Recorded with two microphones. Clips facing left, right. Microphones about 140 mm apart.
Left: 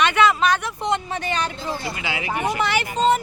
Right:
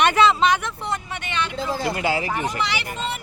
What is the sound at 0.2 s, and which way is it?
Speech, 25° right (ahead or behind).